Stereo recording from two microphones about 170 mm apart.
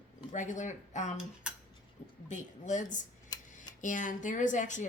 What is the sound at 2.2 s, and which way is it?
Speech, 45° left (ahead or behind).